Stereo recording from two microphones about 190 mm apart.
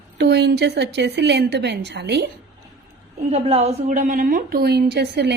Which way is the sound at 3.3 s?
35° right (ahead or behind).